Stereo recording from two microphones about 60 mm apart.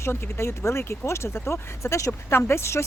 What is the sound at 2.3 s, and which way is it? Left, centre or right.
Speech, left.